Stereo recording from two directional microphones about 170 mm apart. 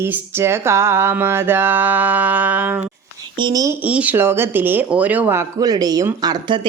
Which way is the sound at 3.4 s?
20° right (ahead or behind).